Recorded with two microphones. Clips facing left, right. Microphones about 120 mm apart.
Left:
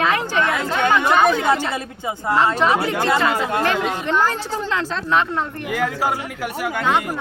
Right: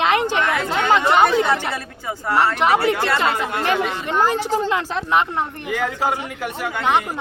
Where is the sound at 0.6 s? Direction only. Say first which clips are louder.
Right 1 dB; 20° right (ahead or behind).